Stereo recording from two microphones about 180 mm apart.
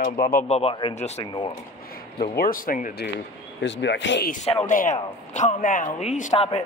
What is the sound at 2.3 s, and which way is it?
Speech, 55° left (ahead or behind).